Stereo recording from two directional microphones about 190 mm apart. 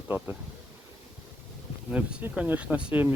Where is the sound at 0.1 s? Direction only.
10° right (ahead or behind).